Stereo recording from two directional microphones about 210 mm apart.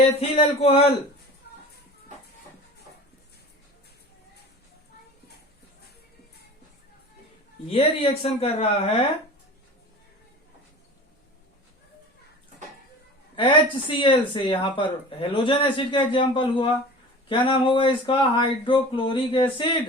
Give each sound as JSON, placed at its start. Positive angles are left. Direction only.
{"t": 0.2, "sound": "speech", "side_deg": 30}
{"t": 7.7, "sound": "speech", "side_deg": 30}
{"t": 13.3, "sound": "speech", "side_deg": 25}